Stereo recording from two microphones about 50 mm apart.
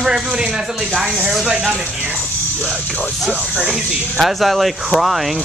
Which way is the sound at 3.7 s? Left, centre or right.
Centre.